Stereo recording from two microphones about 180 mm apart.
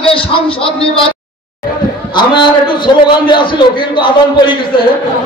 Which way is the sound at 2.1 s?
25° left (ahead or behind).